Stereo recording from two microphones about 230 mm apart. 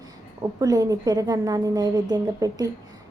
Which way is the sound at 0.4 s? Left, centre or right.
Centre.